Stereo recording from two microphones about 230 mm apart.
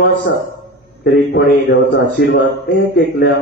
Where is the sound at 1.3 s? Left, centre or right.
Left.